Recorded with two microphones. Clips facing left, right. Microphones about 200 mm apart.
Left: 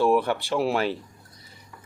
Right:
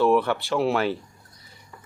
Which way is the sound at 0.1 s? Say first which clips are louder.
Right 1 dB; 40° left (ahead or behind).